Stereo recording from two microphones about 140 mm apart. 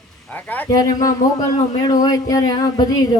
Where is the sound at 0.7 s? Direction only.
25° left (ahead or behind).